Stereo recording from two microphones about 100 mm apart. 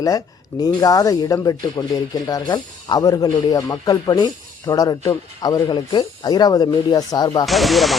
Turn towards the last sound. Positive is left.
turn(degrees=0)  # may be behind; listen again after turning